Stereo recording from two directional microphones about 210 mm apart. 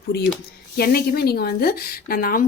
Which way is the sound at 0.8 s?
50° left (ahead or behind).